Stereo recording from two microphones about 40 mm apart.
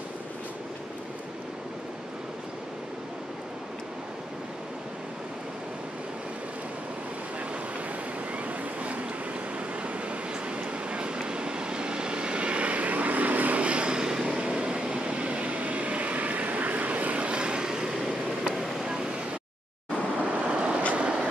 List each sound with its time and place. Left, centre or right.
8.5 s vehicle: right
10.5 s vehicle: right
13.6 s vehicle: right
18.5 s vehicle: centre
20.4 s vehicle: right
21.0 s train: right